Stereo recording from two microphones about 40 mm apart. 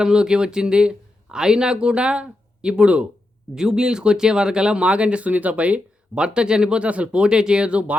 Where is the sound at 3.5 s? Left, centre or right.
Centre; by 6.2 s right.